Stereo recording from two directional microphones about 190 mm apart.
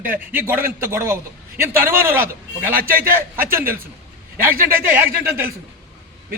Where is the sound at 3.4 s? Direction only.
10° right (ahead or behind).